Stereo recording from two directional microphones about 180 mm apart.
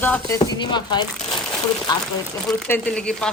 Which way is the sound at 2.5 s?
10° left (ahead or behind).